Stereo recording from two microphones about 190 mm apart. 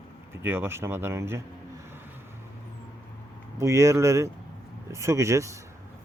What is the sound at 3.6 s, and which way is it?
Speech, 15° right (ahead or behind).